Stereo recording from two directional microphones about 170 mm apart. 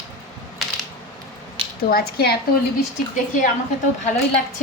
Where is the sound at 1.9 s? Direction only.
70° left (ahead or behind).